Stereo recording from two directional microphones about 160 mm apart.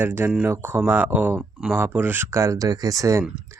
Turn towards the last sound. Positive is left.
turn(degrees=-20)  # may be behind; listen again after turning